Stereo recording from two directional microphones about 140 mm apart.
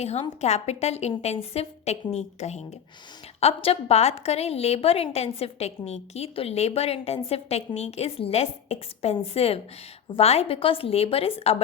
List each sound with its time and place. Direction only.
0.0 s a woman's voice: 50° left (ahead or behind)